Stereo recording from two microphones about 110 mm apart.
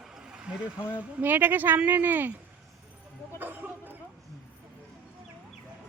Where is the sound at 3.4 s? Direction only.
15° right (ahead or behind).